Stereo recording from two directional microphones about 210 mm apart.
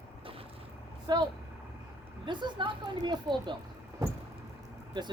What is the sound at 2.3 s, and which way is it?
A woman's voice, 20° right (ahead or behind).